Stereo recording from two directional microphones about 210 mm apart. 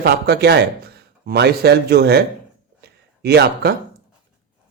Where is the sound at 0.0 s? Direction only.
50° right (ahead or behind).